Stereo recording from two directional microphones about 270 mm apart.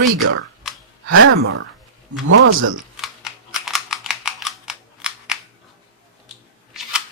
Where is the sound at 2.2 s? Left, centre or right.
Right.